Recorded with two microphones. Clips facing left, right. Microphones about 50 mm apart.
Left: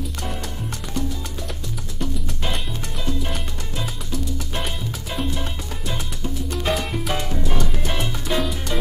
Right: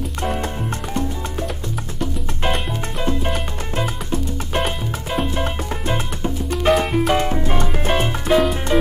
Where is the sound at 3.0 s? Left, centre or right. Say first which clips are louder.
Right 5 dB; right.